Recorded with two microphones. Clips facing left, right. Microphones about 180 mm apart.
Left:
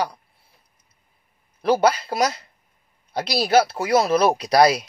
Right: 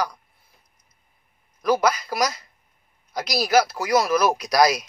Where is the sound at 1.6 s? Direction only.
30° left (ahead or behind).